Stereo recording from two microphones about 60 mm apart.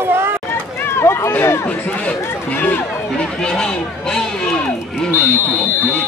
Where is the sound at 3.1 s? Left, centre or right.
Centre.